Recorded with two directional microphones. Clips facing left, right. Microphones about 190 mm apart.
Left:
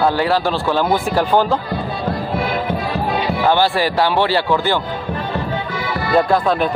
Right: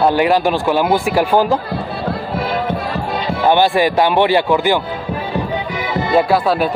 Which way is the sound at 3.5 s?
20° right (ahead or behind).